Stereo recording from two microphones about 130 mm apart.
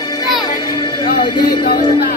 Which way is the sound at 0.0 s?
30° left (ahead or behind).